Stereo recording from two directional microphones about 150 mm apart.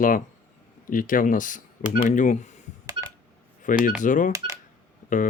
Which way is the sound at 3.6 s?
60° left (ahead or behind).